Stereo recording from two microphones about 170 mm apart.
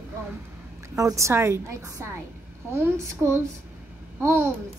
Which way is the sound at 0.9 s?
20° right (ahead or behind).